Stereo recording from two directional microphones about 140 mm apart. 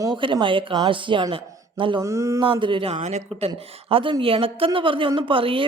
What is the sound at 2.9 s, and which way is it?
Speech, 55° right (ahead or behind).